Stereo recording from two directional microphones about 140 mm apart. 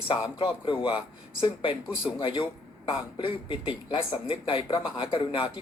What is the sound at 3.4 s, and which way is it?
Speech, 35° left (ahead or behind).